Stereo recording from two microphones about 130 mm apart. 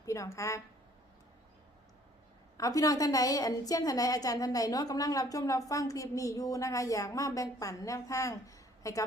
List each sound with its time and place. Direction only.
0.0 s a woman's voice: 25° left (ahead or behind)
2.6 s a woman's voice: 30° left (ahead or behind)